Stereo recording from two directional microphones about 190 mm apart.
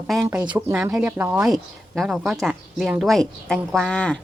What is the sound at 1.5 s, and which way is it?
Speech, centre (ahead or behind).